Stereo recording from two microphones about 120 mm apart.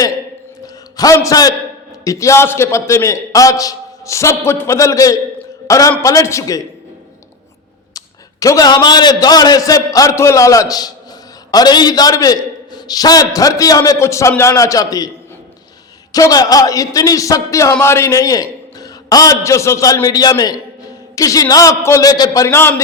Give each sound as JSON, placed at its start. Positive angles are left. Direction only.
{"t": 0.9, "sound": "a man's voice", "side_deg": 30}
{"t": 7.9, "sound": "a man's voice", "side_deg": 30}
{"t": 16.1, "sound": "speech", "side_deg": 30}